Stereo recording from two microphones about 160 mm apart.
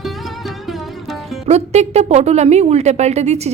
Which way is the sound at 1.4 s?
40° right (ahead or behind).